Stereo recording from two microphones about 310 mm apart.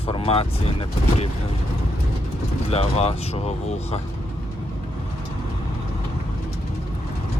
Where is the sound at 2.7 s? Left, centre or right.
Centre.